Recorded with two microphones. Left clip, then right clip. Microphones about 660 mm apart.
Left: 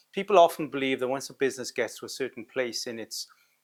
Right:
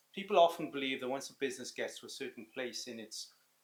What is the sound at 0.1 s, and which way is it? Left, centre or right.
Speech, left.